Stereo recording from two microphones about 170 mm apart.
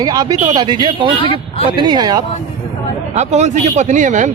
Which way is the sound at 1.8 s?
25° right (ahead or behind).